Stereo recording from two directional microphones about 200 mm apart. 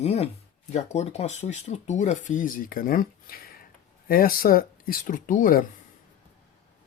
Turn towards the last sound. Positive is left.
turn(degrees=45)  # may be behind; listen again after turning